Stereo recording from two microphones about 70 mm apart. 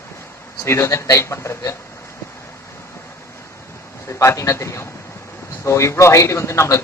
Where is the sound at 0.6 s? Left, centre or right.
Left.